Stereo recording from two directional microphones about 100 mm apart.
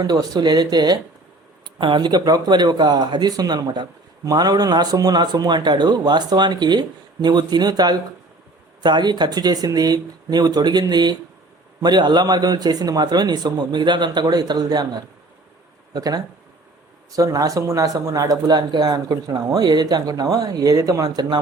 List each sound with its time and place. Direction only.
0.0 s speech: 40° right (ahead or behind)